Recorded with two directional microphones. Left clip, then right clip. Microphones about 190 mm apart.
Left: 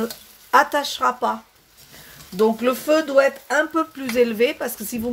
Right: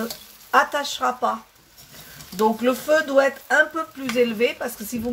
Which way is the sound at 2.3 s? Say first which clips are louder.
Left 1 dB; 45° left (ahead or behind).